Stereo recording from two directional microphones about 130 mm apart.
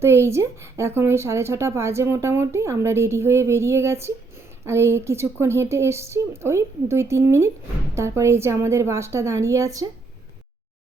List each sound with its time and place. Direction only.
0.0 s speech: 20° right (ahead or behind)